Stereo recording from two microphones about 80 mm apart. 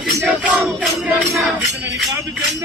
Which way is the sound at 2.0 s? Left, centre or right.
Centre.